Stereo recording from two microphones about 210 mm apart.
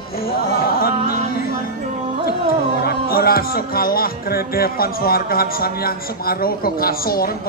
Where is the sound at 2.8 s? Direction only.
45° left (ahead or behind).